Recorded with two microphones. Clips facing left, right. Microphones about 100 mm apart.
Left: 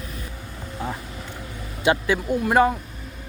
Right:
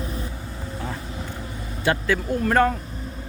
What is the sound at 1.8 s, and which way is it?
Speech, 15° left (ahead or behind).